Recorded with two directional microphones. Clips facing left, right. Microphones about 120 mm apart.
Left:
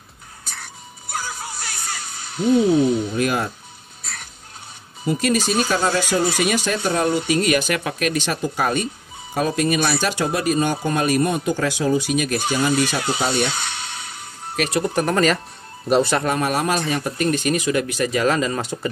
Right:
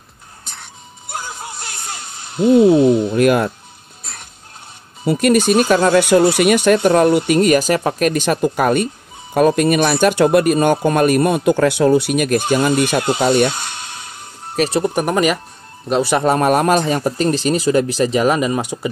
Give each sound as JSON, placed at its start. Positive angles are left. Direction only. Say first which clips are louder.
{"t": 0.5, "sound": "music", "louder": "left 1 dB", "side_deg": -20}
{"t": 2.3, "sound": "speech", "louder": "right 6 dB", "side_deg": -50}
{"t": 5.0, "sound": "speech", "louder": "right 6 dB", "side_deg": -55}
{"t": 14.5, "sound": "speech", "louder": "right 5 dB", "side_deg": -30}
{"t": 15.0, "sound": "speech", "louder": "even", "side_deg": -15}
{"t": 16.3, "sound": "speech", "louder": "right 7 dB", "side_deg": -50}
{"t": 16.8, "sound": "speech", "louder": "right 5 dB", "side_deg": -35}